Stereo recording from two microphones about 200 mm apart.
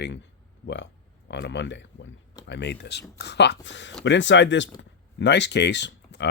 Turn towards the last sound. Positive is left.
turn(degrees=60)  # may be behind; listen again after turning